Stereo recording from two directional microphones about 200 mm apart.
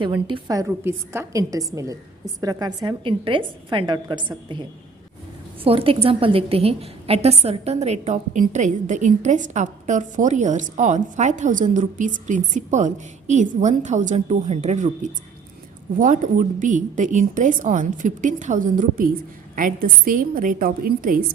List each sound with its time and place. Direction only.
0.0 s a woman's voice: 25° right (ahead or behind)
5.6 s a woman's voice: 25° right (ahead or behind); by 21.2 s 45° right (ahead or behind)